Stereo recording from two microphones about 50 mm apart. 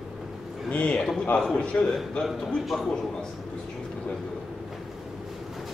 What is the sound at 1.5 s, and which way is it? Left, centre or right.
Speech, left.